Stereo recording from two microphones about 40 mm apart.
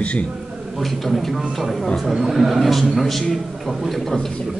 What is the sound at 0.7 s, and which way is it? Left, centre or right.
Speech, centre.